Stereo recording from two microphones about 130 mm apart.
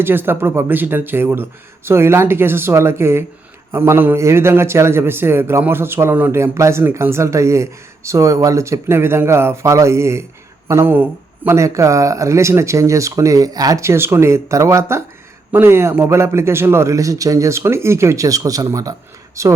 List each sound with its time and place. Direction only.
0.0 s a man's voice: 15° right (ahead or behind)